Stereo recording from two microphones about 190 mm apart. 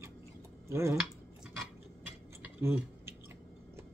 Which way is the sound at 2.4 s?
10° right (ahead or behind).